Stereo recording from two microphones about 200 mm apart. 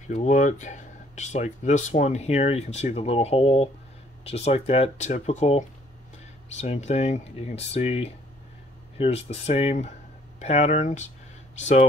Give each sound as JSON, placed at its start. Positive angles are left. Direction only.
{"t": 0.1, "sound": "speech", "side_deg": 35}